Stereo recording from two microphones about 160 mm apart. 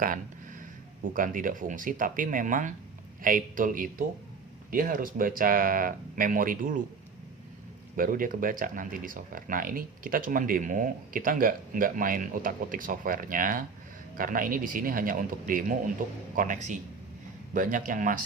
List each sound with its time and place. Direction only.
1.1 s speech: 55° right (ahead or behind)
7.9 s a man's voice: 60° right (ahead or behind)